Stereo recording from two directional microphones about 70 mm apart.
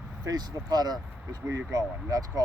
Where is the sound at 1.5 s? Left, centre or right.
Right.